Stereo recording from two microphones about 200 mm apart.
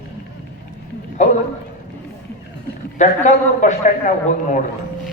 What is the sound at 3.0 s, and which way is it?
Speech, 35° left (ahead or behind).